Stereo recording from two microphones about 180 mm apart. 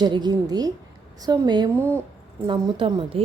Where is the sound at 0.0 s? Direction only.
25° right (ahead or behind).